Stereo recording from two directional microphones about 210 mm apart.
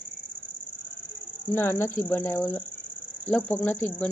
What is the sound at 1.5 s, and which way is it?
Speech, 10° left (ahead or behind).